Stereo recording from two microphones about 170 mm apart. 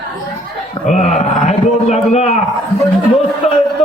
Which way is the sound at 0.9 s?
40° left (ahead or behind).